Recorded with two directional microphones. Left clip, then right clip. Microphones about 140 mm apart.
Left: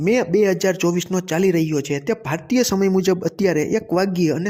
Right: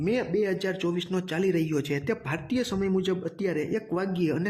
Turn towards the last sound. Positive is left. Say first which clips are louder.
# left 9 dB
turn(degrees=35)  # may be behind; listen again after turning